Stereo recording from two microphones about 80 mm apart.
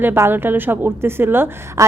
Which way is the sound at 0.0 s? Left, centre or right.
Right.